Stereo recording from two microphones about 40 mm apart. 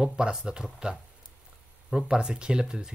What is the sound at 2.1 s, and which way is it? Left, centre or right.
Speech, right.